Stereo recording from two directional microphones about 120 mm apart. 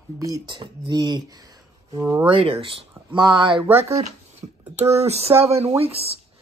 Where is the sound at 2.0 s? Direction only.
20° right (ahead or behind).